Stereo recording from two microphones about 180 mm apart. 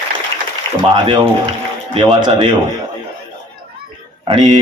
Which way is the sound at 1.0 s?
30° right (ahead or behind).